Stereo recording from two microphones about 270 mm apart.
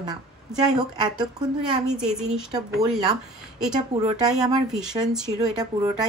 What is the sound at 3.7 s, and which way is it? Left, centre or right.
A woman's voice, centre.